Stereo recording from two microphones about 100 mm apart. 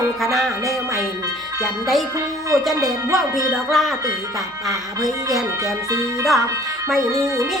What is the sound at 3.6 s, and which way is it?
Speech, centre (ahead or behind).